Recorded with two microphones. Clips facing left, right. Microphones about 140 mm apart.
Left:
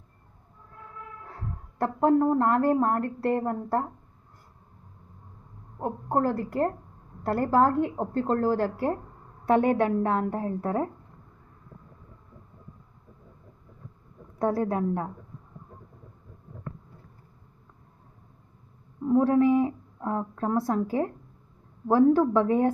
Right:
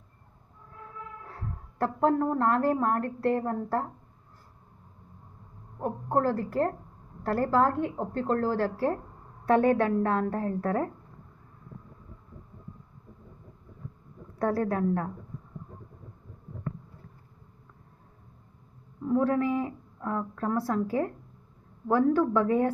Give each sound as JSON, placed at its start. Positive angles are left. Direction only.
{"t": 1.3, "sound": "a woman's voice", "side_deg": 20}
{"t": 5.8, "sound": "speech", "side_deg": 25}
{"t": 14.3, "sound": "speech", "side_deg": 25}
{"t": 19.0, "sound": "speech", "side_deg": 25}